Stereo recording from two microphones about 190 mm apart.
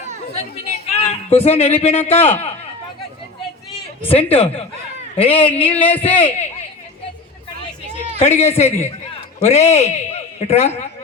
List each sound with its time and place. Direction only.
0.7 s a man's voice: 35° left (ahead or behind)
4.1 s a man's voice: 30° left (ahead or behind)
8.2 s a man's voice: 35° left (ahead or behind)